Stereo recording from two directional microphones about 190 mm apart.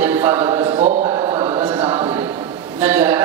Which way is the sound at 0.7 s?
35° right (ahead or behind).